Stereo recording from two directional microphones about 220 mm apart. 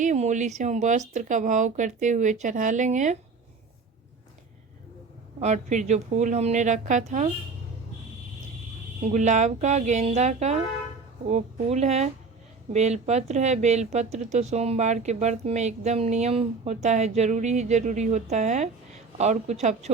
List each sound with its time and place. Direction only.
0.0 s speech: 35° right (ahead or behind)
5.4 s speech: 30° right (ahead or behind)
9.0 s speech: 35° right (ahead or behind)